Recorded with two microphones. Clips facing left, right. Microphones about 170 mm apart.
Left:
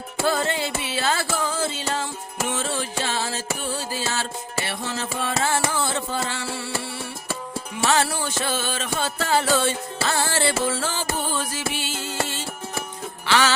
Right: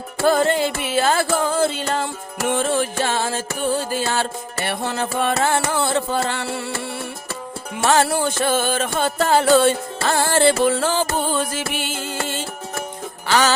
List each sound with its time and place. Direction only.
0.2 s music: 50° right (ahead or behind)
7.8 s music: 50° right (ahead or behind)
13.2 s music: 40° right (ahead or behind)